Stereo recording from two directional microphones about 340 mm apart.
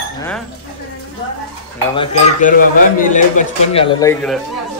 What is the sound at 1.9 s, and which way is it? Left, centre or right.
A man's voice, left.